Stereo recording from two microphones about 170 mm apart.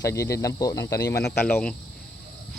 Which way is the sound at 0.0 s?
15° left (ahead or behind).